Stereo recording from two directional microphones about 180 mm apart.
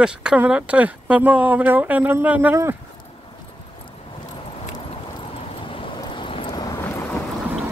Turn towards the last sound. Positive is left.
turn(degrees=5)  # may be behind; listen again after turning